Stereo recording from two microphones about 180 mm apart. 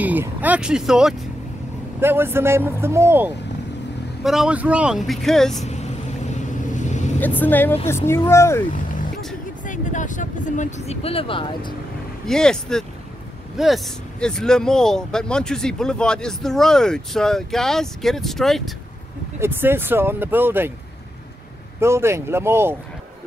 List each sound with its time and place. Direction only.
0.0 s speech: 10° right (ahead or behind)
4.2 s speech: centre (ahead or behind)
6.7 s vehicle: 40° left (ahead or behind)
7.2 s speech: 10° left (ahead or behind)
9.7 s speech: 45° left (ahead or behind); by 11.7 s 30° left (ahead or behind)
12.3 s speech: 5° left (ahead or behind)
19.4 s speech: 10° right (ahead or behind)
21.7 s speech: 15° right (ahead or behind)